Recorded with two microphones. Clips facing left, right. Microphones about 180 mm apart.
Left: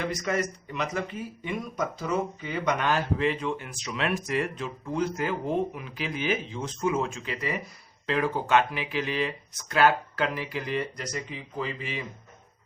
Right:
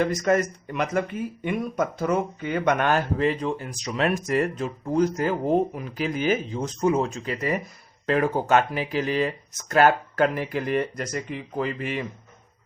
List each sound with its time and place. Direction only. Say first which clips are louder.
0.0 s speech: right 7 dB; 45° right (ahead or behind)